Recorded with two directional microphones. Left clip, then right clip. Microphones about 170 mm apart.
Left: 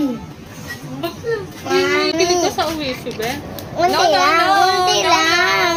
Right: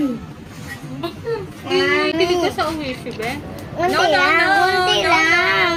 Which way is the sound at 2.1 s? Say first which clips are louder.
Left 2 dB; 15° right (ahead or behind).